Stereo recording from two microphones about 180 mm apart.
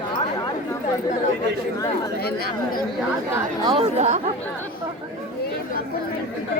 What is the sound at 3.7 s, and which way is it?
Speech, 30° right (ahead or behind).